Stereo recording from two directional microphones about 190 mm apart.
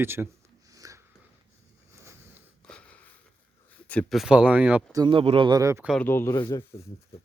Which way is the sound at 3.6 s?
5° left (ahead or behind).